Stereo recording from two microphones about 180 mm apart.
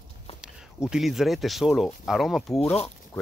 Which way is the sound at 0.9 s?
Centre (ahead or behind).